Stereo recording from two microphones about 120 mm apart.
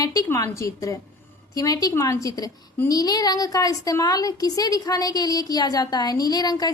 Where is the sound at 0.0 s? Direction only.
30° left (ahead or behind).